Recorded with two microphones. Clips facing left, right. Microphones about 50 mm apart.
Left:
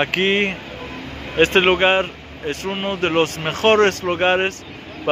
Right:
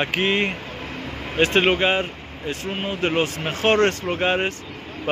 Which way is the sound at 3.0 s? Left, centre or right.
Left.